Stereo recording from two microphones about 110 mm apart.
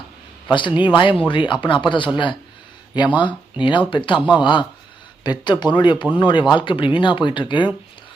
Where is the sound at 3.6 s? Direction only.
50° left (ahead or behind).